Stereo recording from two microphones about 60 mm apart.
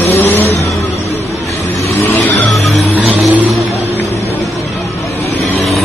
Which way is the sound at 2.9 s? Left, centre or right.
Right.